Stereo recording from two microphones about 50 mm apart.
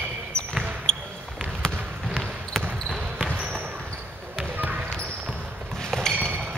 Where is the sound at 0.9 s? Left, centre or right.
Centre.